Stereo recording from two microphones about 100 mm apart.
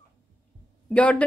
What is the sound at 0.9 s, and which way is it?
Speech, 10° left (ahead or behind).